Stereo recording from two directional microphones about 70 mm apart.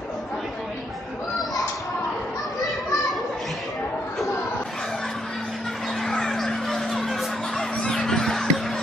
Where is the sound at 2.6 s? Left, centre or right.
Centre.